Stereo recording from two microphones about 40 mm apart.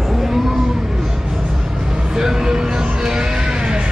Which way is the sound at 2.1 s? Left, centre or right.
Centre.